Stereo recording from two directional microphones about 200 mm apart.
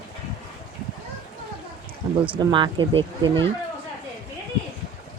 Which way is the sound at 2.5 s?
25° right (ahead or behind).